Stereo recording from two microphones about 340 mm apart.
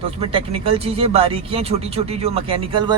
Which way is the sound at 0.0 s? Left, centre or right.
Centre.